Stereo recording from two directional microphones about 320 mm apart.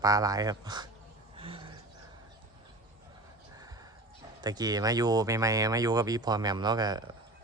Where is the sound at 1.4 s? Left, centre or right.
Centre.